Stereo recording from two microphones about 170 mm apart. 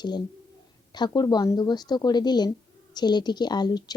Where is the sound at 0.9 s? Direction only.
25° left (ahead or behind).